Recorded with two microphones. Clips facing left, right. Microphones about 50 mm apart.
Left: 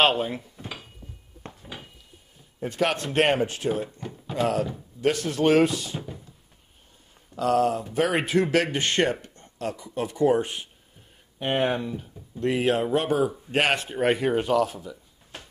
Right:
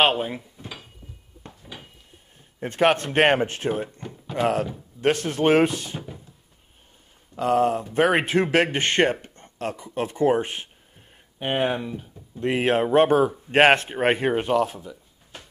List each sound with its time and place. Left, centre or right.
0.0 s speech: centre
2.6 s speech: right
7.3 s speech: right
7.9 s speech: right
11.3 s speech: centre
12.4 s speech: right